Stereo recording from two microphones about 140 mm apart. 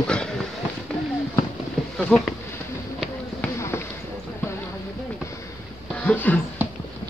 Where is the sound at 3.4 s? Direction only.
20° left (ahead or behind).